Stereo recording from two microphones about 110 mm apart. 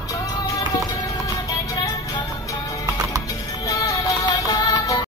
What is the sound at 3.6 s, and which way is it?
Music, 30° left (ahead or behind).